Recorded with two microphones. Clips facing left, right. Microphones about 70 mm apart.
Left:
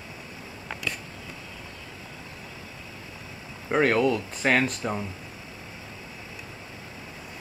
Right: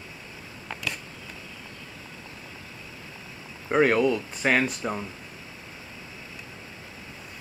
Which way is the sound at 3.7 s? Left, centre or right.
Centre.